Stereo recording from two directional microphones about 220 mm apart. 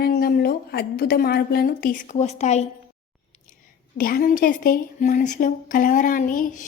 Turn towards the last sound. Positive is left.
turn(degrees=35)  # may be behind; listen again after turning